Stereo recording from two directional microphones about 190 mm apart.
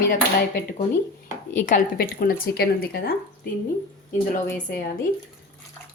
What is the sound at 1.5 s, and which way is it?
Speech, 40° left (ahead or behind).